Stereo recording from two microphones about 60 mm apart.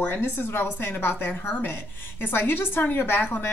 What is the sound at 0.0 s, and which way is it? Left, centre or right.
A woman's voice, left.